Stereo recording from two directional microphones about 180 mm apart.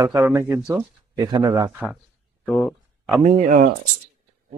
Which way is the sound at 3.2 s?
40° right (ahead or behind).